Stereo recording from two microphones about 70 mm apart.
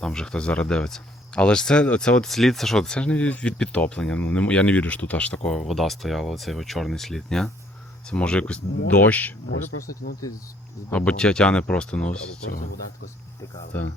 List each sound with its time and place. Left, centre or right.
0.0 s speech: centre
5.6 s speech: centre; by 9.7 s left
10.9 s speech: centre
13.7 s speech: left